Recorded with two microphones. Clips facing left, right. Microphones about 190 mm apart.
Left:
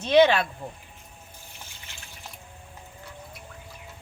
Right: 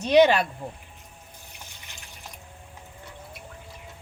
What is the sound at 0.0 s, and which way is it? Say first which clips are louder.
Speech: right 1 dB; 15° right (ahead or behind).